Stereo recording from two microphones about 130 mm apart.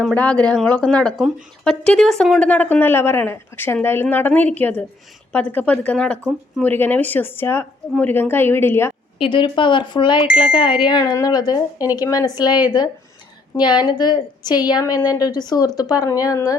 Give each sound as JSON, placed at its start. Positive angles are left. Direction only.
{"t": 0.0, "sound": "speech", "side_deg": 10}
{"t": 9.1, "sound": "a woman's voice", "side_deg": 40}